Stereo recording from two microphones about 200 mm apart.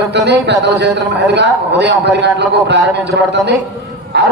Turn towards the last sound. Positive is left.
turn(degrees=-60)  # may be behind; listen again after turning